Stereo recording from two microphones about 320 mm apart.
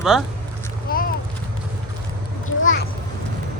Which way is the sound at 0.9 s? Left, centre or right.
Left.